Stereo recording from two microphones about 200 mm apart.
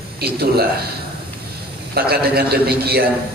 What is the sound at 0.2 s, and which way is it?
Speech, 50° right (ahead or behind).